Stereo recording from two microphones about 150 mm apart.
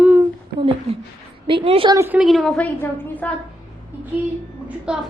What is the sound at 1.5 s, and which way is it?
Speech, 35° right (ahead or behind).